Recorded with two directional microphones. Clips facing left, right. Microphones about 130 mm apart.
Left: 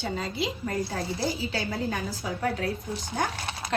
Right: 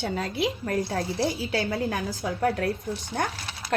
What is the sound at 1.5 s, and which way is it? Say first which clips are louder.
A woman's voice: right 3 dB; 65° right (ahead or behind).